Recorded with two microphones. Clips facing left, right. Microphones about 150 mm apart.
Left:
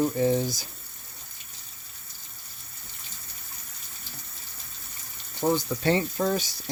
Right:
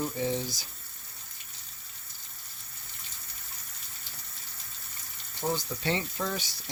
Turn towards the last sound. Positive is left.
turn(degrees=40)  # may be behind; listen again after turning